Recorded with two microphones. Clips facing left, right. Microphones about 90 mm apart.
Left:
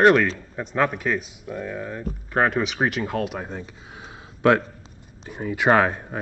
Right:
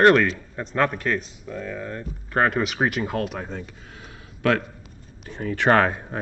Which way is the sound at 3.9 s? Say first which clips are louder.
Left 2 dB; 20° left (ahead or behind).